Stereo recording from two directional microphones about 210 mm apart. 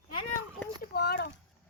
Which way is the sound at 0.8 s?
45° left (ahead or behind).